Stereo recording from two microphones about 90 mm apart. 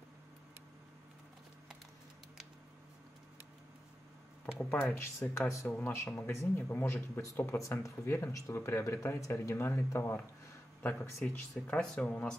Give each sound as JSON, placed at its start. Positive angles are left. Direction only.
{"t": 4.9, "sound": "speech", "side_deg": 30}
{"t": 5.7, "sound": "speech", "side_deg": 15}